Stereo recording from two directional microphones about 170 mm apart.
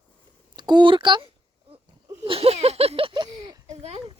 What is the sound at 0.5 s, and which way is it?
Speech, 25° right (ahead or behind).